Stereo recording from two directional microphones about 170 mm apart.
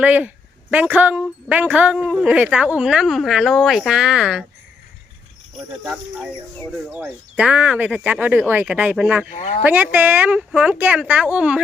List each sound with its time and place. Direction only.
0.0 s speech: 10° right (ahead or behind)
5.8 s speech: 5° right (ahead or behind)
9.3 s speech: 40° left (ahead or behind)
9.6 s speech: 10° right (ahead or behind)